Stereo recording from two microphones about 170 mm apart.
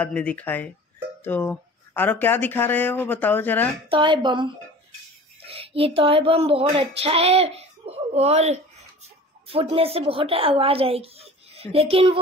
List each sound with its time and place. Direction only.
0.0 s speech: 5° left (ahead or behind)
3.9 s speech: 30° right (ahead or behind)
5.5 s female singing: 35° right (ahead or behind)
9.5 s a woman's voice: 35° right (ahead or behind)